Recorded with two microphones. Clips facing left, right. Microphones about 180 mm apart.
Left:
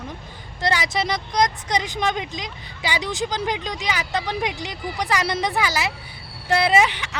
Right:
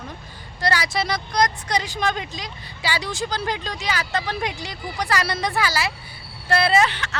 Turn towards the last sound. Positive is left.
turn(degrees=15)  # may be behind; listen again after turning